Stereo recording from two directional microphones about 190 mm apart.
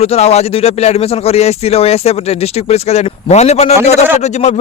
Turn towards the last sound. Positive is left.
turn(degrees=35)  # may be behind; listen again after turning